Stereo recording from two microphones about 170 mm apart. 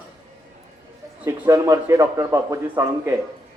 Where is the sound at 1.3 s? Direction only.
15° right (ahead or behind).